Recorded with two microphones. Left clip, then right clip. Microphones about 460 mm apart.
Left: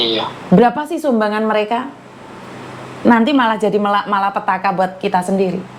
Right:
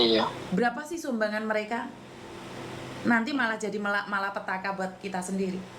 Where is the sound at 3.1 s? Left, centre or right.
Left.